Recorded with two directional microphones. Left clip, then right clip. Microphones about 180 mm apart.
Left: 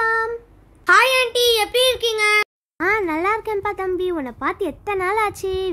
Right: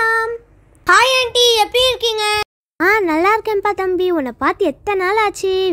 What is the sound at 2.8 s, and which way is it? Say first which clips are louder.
Speech: right 6 dB; 30° right (ahead or behind).